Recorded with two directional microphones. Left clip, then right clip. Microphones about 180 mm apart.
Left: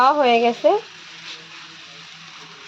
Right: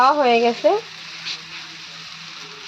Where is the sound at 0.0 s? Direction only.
Centre (ahead or behind).